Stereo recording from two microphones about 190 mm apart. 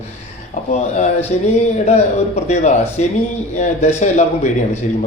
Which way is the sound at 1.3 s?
40° left (ahead or behind).